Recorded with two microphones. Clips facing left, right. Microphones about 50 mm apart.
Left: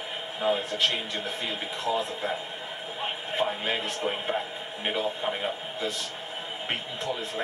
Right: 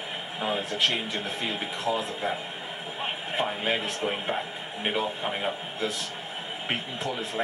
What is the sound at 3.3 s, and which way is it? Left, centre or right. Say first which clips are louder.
A man's voice: even; centre.